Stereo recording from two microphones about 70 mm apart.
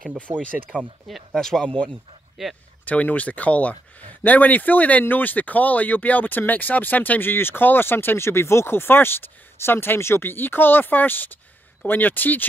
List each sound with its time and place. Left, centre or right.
0.3 s speech: right
0.7 s speech: left
1.3 s speech: centre; by 12.4 s left